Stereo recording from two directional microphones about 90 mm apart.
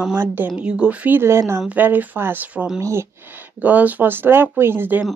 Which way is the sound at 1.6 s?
15° right (ahead or behind).